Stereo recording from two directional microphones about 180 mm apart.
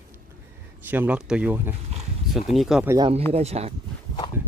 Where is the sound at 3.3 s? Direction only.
35° right (ahead or behind).